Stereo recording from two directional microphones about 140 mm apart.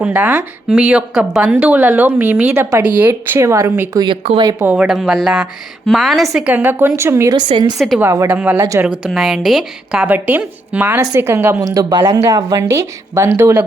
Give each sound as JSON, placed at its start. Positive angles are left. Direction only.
{"t": 0.0, "sound": "speech", "side_deg": -10}
{"t": 4.1, "sound": "speech", "side_deg": -45}
{"t": 4.6, "sound": "a woman's voice", "side_deg": -10}
{"t": 6.3, "sound": "speech", "side_deg": -10}
{"t": 7.3, "sound": "a woman's voice", "side_deg": -30}
{"t": 7.9, "sound": "speech", "side_deg": -20}
{"t": 9.0, "sound": "speech", "side_deg": 0}
{"t": 11.6, "sound": "speech", "side_deg": -25}